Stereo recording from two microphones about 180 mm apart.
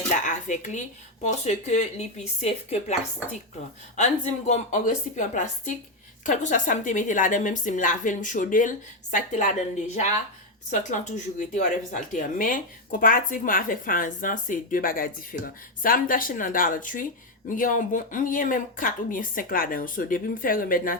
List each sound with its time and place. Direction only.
0.1 s speech: 45° left (ahead or behind)
3.9 s speech: 40° left (ahead or behind)